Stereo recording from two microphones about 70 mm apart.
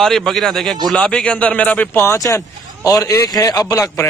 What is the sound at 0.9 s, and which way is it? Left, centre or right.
A man's voice, centre.